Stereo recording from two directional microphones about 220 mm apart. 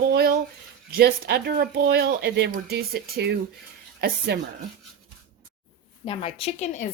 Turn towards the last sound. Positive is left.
turn(degrees=30)  # may be behind; listen again after turning